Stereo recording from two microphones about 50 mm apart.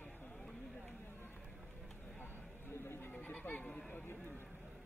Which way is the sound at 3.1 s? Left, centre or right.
Left.